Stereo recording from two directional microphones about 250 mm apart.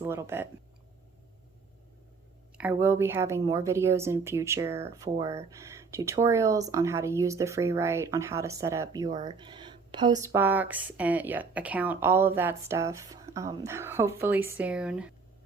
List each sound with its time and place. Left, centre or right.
0.0 s speech: centre
2.6 s speech: centre